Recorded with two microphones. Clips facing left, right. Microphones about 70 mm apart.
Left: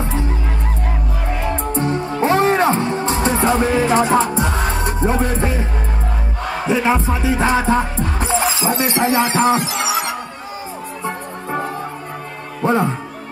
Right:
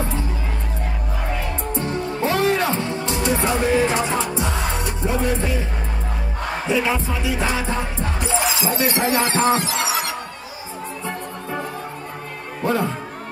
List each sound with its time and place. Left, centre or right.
1.4 s music: left
6.7 s music: left
12.6 s speech: left